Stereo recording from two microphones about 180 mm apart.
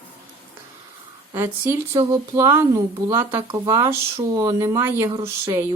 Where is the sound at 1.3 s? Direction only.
15° right (ahead or behind).